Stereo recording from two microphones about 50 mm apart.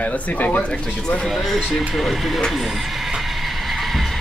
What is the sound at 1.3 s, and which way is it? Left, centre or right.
Speech, centre.